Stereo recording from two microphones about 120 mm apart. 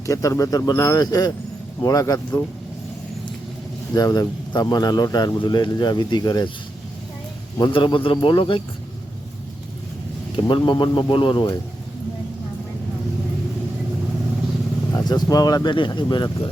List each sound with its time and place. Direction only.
0.0 s a man's voice: 25° left (ahead or behind)
3.9 s a man's voice: 30° left (ahead or behind)
7.6 s speech: 40° left (ahead or behind)
10.3 s speech: 40° left (ahead or behind)
15.0 s a man's voice: 35° left (ahead or behind)